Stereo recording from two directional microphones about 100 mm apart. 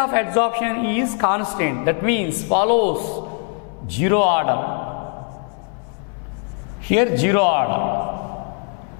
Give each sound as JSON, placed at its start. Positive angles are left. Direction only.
{"t": 0.0, "sound": "a man's voice", "side_deg": 10}
{"t": 6.9, "sound": "a man's voice", "side_deg": 10}